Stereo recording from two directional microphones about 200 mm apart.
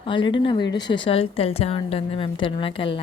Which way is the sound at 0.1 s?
25° left (ahead or behind).